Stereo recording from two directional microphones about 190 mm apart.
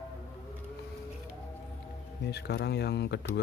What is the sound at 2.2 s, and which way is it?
Speech, 60° left (ahead or behind).